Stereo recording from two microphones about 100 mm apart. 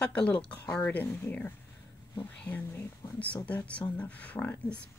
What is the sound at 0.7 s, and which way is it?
Speech, 15° left (ahead or behind).